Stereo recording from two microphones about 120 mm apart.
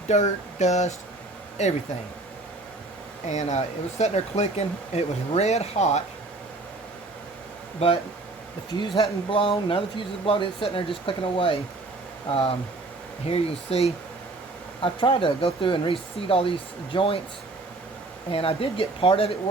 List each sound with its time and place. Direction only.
0.1 s a sound: 75° left (ahead or behind)
3.2 s speech: 70° left (ahead or behind)
8.8 s speech: 45° left (ahead or behind)
14.8 s speech: 45° left (ahead or behind)
18.3 s speech: 50° left (ahead or behind)